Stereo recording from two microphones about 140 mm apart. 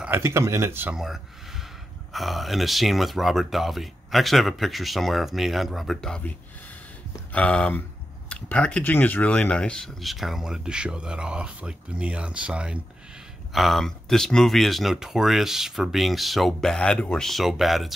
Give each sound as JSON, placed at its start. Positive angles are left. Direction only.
{"t": 0.0, "sound": "speech", "side_deg": -15}
{"t": 0.9, "sound": "speech", "side_deg": 0}
{"t": 7.3, "sound": "speech", "side_deg": 10}